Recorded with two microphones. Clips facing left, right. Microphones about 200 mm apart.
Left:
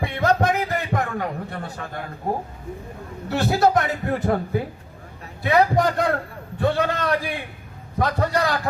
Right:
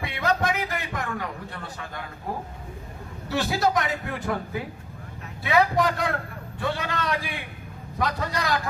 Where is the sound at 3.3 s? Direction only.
55° left (ahead or behind).